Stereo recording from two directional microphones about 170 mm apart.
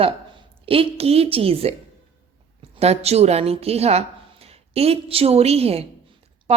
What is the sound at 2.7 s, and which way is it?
A woman's voice, 40° right (ahead or behind).